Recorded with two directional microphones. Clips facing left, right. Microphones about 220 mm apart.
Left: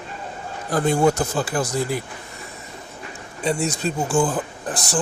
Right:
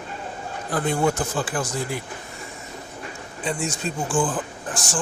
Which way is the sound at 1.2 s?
40° left (ahead or behind).